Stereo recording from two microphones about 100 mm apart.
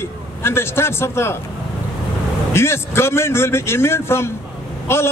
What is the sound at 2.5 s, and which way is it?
A man's voice, 25° left (ahead or behind).